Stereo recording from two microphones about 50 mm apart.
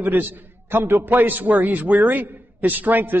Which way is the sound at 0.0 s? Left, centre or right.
Right.